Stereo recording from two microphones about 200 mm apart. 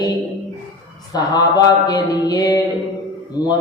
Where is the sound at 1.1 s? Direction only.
20° left (ahead or behind).